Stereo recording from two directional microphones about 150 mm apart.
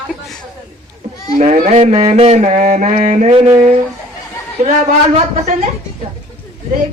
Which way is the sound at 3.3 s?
35° right (ahead or behind).